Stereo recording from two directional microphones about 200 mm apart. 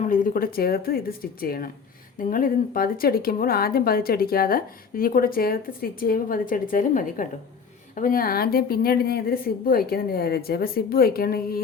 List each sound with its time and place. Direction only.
0.1 s a woman's voice: 45° left (ahead or behind)